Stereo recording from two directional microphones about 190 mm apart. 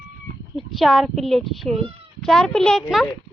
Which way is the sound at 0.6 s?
Centre (ahead or behind).